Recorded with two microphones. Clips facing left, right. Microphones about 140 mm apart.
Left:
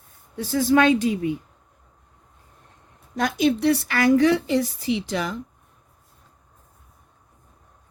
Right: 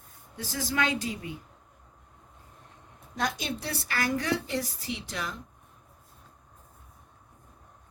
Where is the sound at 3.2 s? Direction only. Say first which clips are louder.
Left 11 dB; 55° left (ahead or behind); by 5.3 s 90° left.